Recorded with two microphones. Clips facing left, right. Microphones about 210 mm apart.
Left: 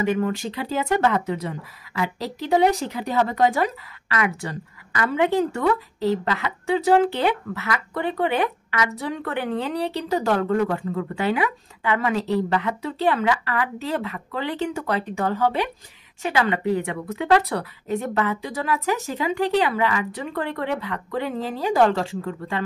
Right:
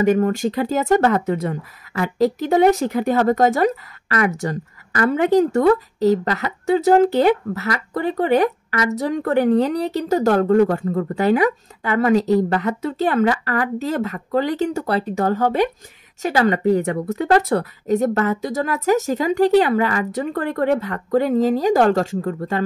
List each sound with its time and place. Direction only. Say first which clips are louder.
0.0 s speech: right 6 dB; 45° right (ahead or behind)